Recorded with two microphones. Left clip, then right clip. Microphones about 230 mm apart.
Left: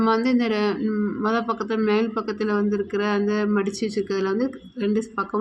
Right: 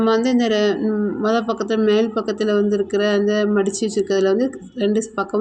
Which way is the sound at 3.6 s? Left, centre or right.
Centre.